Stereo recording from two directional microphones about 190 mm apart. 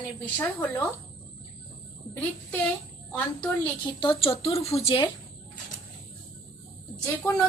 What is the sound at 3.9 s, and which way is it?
Speech, 25° left (ahead or behind).